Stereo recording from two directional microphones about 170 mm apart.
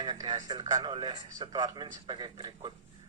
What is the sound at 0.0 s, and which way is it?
Speech, 25° right (ahead or behind).